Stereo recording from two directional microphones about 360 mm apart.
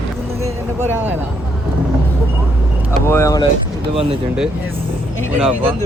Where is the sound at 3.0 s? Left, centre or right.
Centre.